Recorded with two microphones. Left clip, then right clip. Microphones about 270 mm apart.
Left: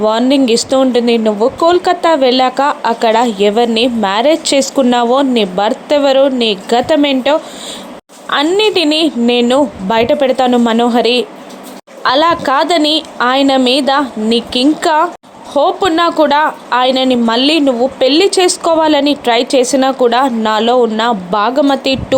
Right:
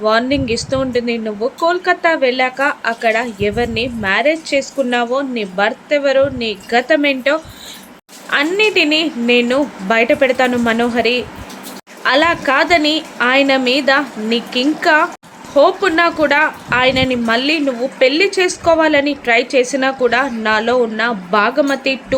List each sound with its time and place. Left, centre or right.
0.0 s a woman's voice: centre